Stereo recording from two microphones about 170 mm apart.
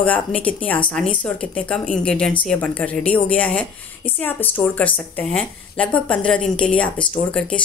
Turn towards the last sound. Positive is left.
turn(degrees=5)  # may be behind; listen again after turning